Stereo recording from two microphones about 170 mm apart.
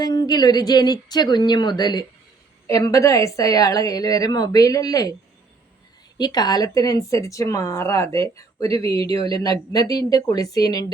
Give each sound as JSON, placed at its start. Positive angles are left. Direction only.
{"t": 0.0, "sound": "speech", "side_deg": 25}
{"t": 6.1, "sound": "speech", "side_deg": 25}